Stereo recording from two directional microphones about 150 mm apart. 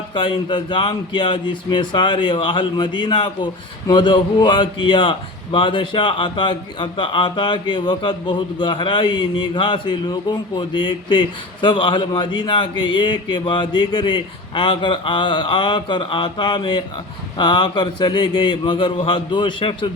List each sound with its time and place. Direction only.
0.1 s speech: 35° left (ahead or behind)